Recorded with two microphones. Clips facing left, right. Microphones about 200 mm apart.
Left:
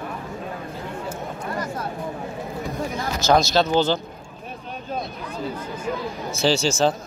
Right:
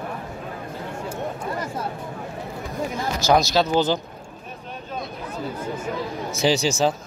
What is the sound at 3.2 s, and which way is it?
Speech, 10° right (ahead or behind).